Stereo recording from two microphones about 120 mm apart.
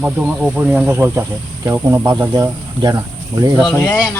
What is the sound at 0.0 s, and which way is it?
Speech, 10° right (ahead or behind).